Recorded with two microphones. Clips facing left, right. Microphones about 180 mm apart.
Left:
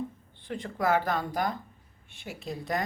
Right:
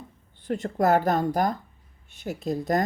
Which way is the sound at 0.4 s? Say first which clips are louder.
Right 6 dB; 45° right (ahead or behind).